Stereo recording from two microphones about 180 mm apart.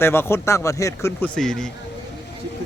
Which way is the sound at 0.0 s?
15° left (ahead or behind).